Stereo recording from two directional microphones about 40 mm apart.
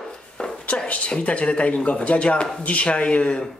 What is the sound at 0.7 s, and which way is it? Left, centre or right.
A man's voice, left.